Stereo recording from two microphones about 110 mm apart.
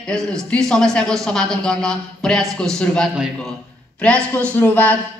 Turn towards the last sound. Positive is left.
turn(degrees=15)  # may be behind; listen again after turning